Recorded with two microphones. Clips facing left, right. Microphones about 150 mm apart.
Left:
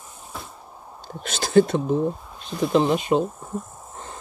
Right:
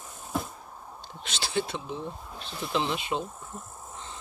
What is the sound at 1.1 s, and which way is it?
Speech, 45° left (ahead or behind).